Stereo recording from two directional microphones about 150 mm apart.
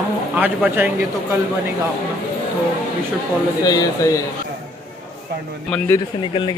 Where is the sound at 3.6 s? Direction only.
25° left (ahead or behind).